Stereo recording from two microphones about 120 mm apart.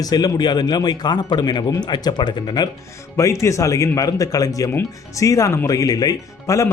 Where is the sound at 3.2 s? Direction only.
25° left (ahead or behind).